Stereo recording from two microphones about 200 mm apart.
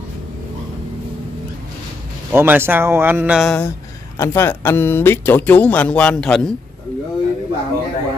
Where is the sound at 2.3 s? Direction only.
10° right (ahead or behind).